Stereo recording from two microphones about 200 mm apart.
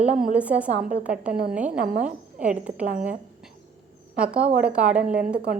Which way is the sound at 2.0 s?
5° right (ahead or behind).